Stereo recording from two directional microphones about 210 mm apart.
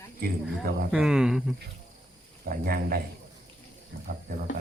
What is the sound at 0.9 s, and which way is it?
Speech, 5° right (ahead or behind).